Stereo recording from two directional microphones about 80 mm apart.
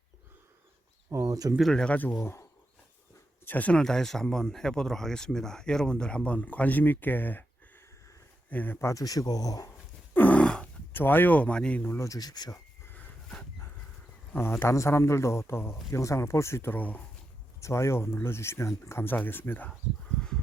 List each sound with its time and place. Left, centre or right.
1.1 s speech: right
1.7 s speech: centre
2.2 s speech: left
3.4 s speech: left
8.4 s speech: left
8.8 s speech: left
10.2 s a sound: centre
10.9 s speech: left
11.9 s speech: left
14.3 s speech: left
16.7 s speech: left
17.6 s speech: left